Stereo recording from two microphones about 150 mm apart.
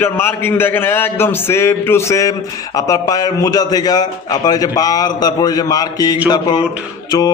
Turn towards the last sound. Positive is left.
turn(degrees=30)  # may be behind; listen again after turning